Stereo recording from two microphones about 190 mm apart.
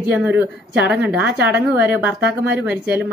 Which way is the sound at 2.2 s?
60° right (ahead or behind).